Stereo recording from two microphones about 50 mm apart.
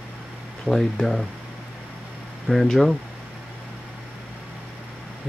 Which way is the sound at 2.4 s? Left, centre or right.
Centre.